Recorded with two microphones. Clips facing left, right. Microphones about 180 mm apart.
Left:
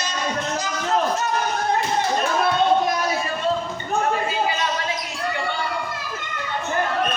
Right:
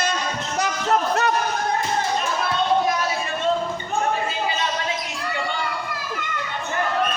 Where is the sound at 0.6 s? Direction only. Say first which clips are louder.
Right 3 dB; 65° right (ahead or behind).